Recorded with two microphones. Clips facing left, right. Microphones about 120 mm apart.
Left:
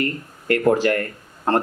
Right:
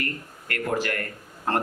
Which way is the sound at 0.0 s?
30° left (ahead or behind).